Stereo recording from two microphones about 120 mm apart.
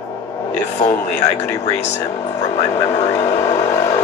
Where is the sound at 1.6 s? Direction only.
65° left (ahead or behind).